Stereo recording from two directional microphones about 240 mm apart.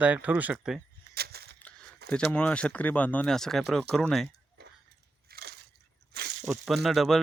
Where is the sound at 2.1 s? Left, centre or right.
Centre.